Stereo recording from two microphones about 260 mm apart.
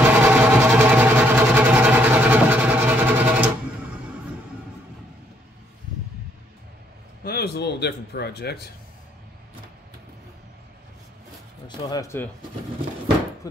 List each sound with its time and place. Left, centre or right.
0.0 s a sound: centre
7.2 s speech: left
11.6 s speech: centre